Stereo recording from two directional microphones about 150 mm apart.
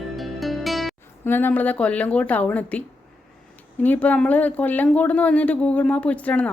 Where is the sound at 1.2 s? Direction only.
15° left (ahead or behind).